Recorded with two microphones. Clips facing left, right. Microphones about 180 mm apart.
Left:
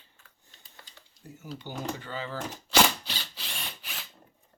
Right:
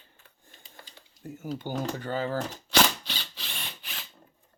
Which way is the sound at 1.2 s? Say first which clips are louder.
Right 7 dB; 50° right (ahead or behind).